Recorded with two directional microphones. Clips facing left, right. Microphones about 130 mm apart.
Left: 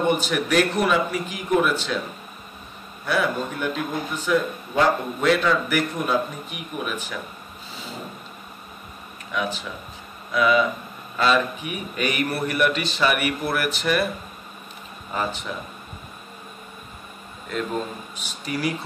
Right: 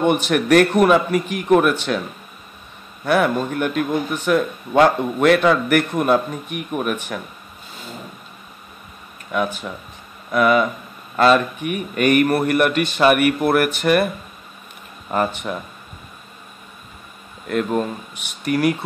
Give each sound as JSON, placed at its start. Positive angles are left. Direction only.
{"t": 0.2, "sound": "a man's voice", "side_deg": -55}
{"t": 3.1, "sound": "a man's voice", "side_deg": -60}
{"t": 9.3, "sound": "a man's voice", "side_deg": -50}
{"t": 15.0, "sound": "a man's voice", "side_deg": -55}
{"t": 18.1, "sound": "a man's voice", "side_deg": -60}